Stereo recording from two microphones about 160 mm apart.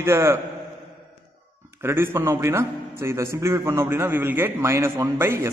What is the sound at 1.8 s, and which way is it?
A man's voice, 15° right (ahead or behind).